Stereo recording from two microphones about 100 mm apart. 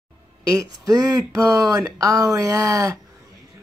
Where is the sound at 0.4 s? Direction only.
35° right (ahead or behind).